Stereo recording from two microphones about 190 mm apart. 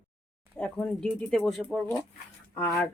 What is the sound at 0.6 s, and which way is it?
Speech, 5° left (ahead or behind).